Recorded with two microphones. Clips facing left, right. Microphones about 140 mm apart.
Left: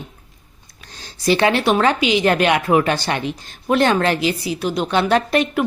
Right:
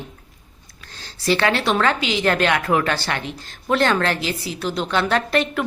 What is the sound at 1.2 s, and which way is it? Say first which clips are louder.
Speech: left 3 dB; 15° left (ahead or behind).